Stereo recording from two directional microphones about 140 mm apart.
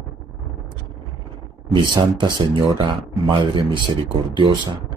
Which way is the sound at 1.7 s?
30° right (ahead or behind).